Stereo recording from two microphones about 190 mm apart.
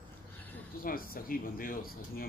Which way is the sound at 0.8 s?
50° left (ahead or behind).